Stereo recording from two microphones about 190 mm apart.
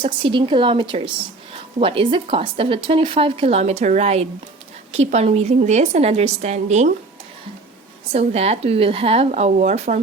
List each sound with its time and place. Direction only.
0.0 s a woman's voice: 25° right (ahead or behind)
8.1 s a woman's voice: 35° right (ahead or behind)